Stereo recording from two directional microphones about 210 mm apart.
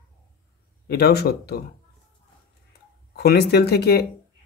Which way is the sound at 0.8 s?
50° left (ahead or behind).